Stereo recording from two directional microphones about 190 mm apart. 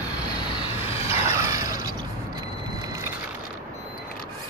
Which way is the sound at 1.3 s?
15° right (ahead or behind).